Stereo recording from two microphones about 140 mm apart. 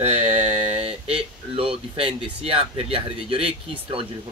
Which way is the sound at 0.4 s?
50° right (ahead or behind).